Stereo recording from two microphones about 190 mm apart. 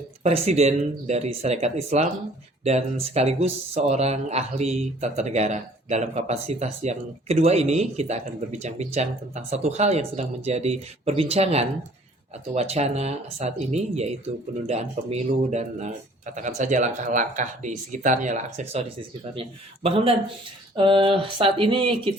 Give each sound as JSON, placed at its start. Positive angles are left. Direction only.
{"t": 0.2, "sound": "speech", "side_deg": -35}